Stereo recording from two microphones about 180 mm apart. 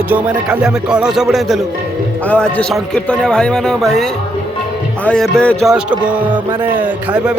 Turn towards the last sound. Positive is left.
turn(degrees=-10)  # may be behind; listen again after turning